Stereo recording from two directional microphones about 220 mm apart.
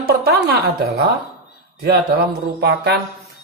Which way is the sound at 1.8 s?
45° right (ahead or behind).